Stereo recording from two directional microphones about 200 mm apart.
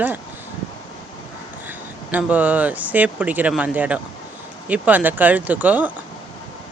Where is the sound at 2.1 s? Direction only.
10° right (ahead or behind).